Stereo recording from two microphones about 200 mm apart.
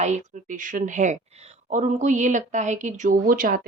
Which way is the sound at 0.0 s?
35° right (ahead or behind).